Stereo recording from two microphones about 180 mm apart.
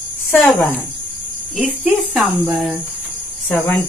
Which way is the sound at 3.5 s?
10° left (ahead or behind).